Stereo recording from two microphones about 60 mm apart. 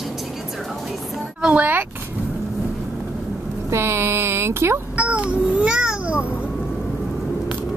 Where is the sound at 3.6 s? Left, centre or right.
Right.